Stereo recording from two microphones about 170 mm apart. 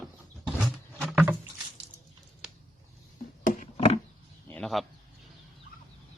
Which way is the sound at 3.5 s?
45° left (ahead or behind).